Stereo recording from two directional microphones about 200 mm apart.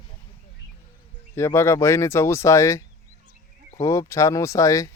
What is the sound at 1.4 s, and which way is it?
Speech, 15° left (ahead or behind).